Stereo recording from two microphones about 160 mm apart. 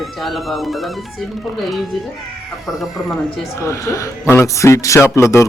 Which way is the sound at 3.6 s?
20° left (ahead or behind).